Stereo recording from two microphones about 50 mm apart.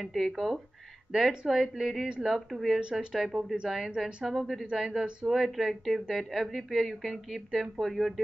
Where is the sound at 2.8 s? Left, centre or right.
Centre.